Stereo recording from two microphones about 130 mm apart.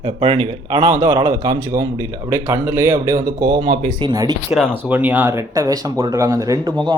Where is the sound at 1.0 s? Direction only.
35° right (ahead or behind).